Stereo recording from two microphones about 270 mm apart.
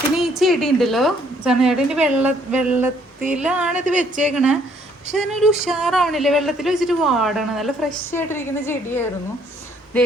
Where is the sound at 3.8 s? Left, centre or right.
Right.